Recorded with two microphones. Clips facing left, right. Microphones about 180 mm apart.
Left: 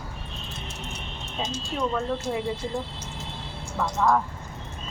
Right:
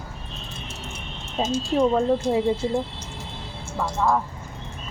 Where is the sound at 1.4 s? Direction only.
40° right (ahead or behind).